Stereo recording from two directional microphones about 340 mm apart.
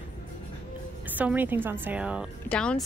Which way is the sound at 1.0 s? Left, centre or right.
Centre.